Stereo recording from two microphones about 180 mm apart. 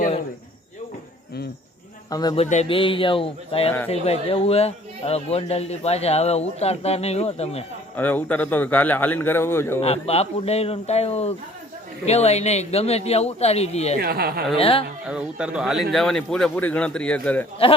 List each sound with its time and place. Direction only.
2.0 s speech: 20° left (ahead or behind)
2.3 s a man's voice: 35° left (ahead or behind)
7.9 s a man's voice: 10° left (ahead or behind)
9.8 s a man's voice: 35° left (ahead or behind)
14.0 s speech: 60° right (ahead or behind)
14.6 s a man's voice: 30° left (ahead or behind)
15.0 s speech: 5° right (ahead or behind)